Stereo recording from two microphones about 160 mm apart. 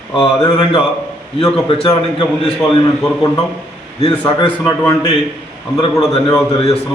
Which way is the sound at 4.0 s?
30° left (ahead or behind).